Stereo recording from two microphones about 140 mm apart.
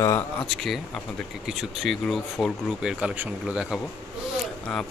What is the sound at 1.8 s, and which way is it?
Speech, centre (ahead or behind).